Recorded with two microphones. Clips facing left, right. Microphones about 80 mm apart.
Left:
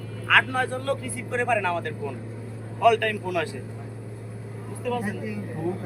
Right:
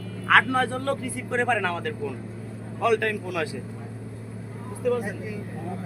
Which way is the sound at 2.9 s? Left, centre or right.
Right.